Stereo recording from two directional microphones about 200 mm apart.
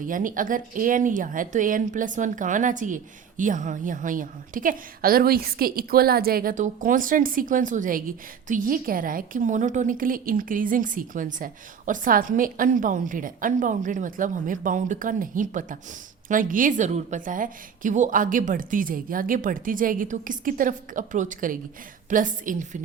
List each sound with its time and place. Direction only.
0.0 s speech: 40° right (ahead or behind)